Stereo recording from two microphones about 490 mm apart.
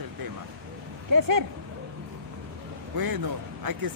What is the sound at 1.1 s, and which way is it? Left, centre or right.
Speech, right.